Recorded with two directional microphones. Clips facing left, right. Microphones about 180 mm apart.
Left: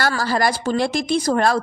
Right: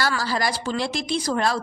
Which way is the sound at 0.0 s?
55° left (ahead or behind).